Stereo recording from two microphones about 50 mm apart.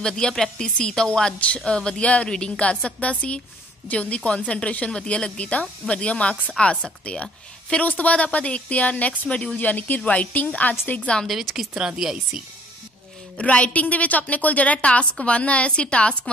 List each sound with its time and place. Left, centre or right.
0.0 s a woman's voice: centre; by 11.1 s left
11.2 s a woman's voice: centre
13.4 s a woman's voice: left